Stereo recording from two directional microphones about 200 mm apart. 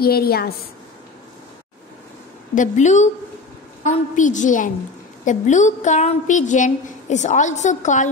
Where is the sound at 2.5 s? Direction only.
35° left (ahead or behind).